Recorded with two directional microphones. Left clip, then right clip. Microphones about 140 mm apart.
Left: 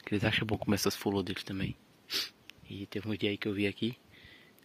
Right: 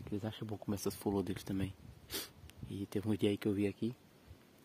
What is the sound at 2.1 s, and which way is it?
Speech, 30° right (ahead or behind).